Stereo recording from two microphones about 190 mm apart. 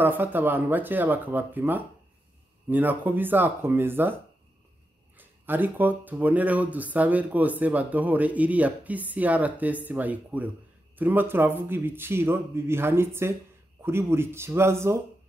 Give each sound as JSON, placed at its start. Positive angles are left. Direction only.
{"t": 0.0, "sound": "speech", "side_deg": -10}